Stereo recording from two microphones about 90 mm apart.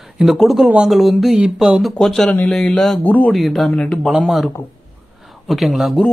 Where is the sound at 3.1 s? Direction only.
15° left (ahead or behind).